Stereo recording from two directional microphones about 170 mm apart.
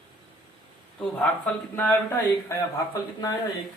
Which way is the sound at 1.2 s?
10° left (ahead or behind).